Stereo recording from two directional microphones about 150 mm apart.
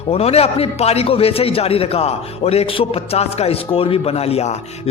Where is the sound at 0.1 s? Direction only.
40° left (ahead or behind).